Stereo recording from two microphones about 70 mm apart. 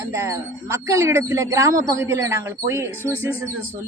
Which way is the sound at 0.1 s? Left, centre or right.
Right.